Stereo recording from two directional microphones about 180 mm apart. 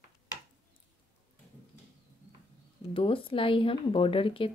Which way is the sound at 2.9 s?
30° left (ahead or behind).